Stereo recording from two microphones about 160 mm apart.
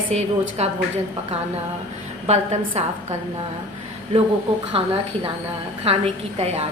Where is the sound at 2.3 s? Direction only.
45° right (ahead or behind).